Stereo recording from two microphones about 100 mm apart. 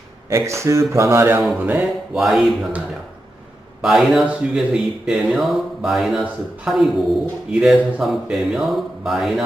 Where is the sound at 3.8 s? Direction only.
Centre (ahead or behind).